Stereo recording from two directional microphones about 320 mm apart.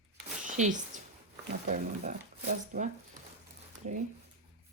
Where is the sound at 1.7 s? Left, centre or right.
Right.